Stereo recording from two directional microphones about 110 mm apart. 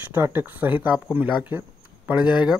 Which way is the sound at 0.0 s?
20° right (ahead or behind).